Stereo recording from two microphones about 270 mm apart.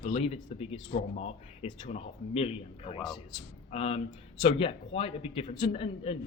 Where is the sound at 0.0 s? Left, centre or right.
Left.